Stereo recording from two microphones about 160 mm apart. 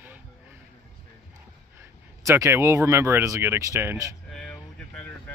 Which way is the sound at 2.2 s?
20° right (ahead or behind).